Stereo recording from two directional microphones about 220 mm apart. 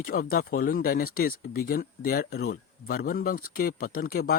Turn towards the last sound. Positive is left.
turn(degrees=40)  # may be behind; listen again after turning